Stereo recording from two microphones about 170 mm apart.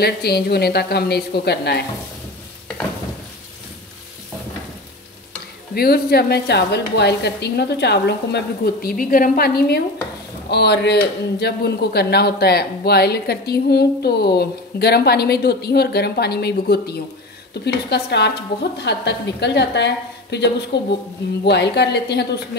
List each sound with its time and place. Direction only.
0.0 s speech: 70° left (ahead or behind)
5.8 s speech: 65° left (ahead or behind)
10.5 s a woman's voice: 75° left (ahead or behind)